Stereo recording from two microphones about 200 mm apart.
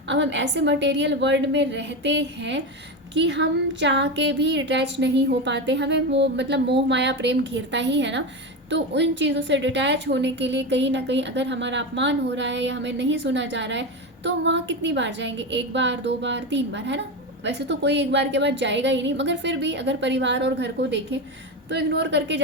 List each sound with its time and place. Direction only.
0.1 s a woman's voice: 60° right (ahead or behind)